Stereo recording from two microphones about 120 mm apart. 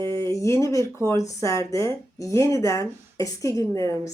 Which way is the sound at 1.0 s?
25° left (ahead or behind).